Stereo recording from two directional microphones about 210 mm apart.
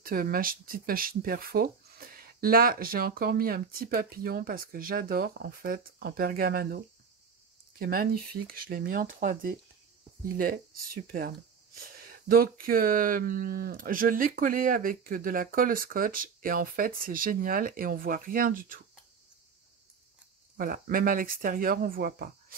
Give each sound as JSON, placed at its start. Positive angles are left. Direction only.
{"t": 0.0, "sound": "speech", "side_deg": -45}
{"t": 7.8, "sound": "speech", "side_deg": -45}
{"t": 20.5, "sound": "speech", "side_deg": -45}